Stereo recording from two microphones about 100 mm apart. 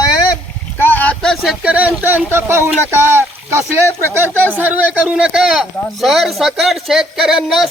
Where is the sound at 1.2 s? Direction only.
5° left (ahead or behind).